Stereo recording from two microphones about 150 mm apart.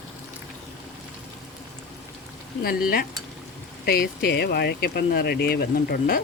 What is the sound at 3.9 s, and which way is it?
Speech, 90° left.